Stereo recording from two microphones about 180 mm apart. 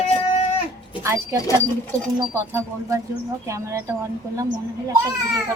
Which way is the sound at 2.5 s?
15° right (ahead or behind).